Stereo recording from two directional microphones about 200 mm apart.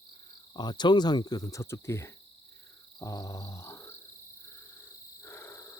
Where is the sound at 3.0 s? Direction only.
15° left (ahead or behind).